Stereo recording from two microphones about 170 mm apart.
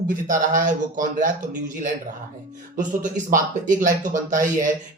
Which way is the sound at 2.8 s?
50° right (ahead or behind).